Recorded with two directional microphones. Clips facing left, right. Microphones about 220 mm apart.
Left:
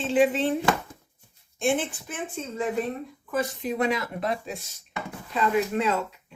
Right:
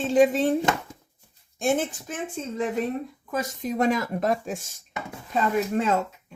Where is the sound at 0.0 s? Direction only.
45° right (ahead or behind).